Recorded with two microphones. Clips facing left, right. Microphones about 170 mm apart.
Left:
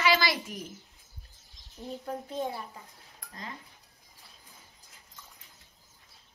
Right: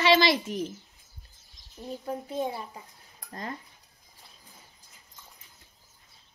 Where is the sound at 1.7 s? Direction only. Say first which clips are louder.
Right 2 dB; centre (ahead or behind).